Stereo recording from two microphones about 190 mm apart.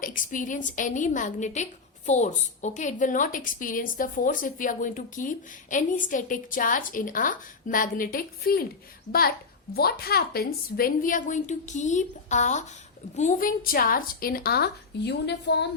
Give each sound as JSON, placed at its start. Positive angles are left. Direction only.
{"t": 0.0, "sound": "a woman's voice", "side_deg": 45}
{"t": 9.7, "sound": "a woman's voice", "side_deg": 55}